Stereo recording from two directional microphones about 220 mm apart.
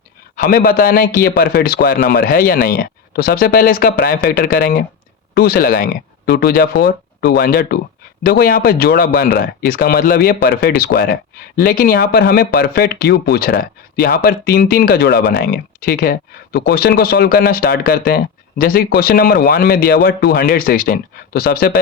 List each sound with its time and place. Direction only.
0.3 s a man's voice: 40° left (ahead or behind)